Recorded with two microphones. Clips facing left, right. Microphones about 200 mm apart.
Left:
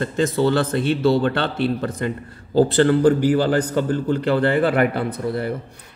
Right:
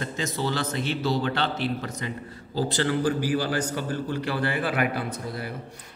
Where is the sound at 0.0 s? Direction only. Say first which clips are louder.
Left 10 dB; 55° left (ahead or behind).